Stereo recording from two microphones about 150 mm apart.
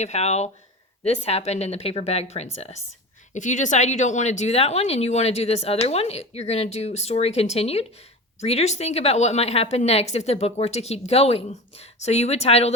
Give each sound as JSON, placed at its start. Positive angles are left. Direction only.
{"t": 0.0, "sound": "speech", "side_deg": 50}
{"t": 3.3, "sound": "speech", "side_deg": 55}